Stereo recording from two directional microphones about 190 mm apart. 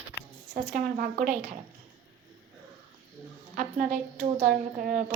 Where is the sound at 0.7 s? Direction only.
45° right (ahead or behind).